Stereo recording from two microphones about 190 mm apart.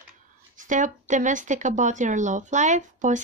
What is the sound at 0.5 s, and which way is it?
Speech, 40° right (ahead or behind).